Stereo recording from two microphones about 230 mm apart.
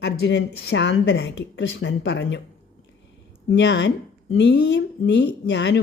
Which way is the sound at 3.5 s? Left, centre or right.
Left.